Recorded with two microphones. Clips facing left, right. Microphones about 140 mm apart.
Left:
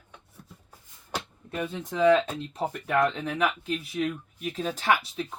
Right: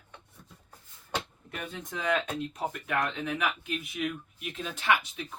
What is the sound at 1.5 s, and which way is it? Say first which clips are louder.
Speech: left 6 dB; 30° left (ahead or behind).